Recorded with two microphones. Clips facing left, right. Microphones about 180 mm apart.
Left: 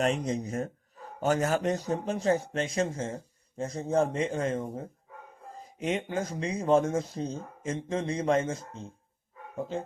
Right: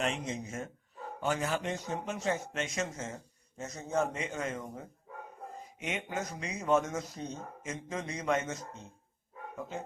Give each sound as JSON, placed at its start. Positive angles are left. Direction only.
{"t": 0.0, "sound": "speech", "side_deg": 40}